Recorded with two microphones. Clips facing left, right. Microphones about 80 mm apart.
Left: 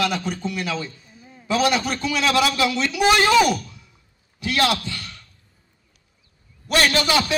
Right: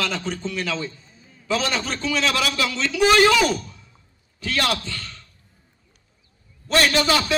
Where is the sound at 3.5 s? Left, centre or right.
Right.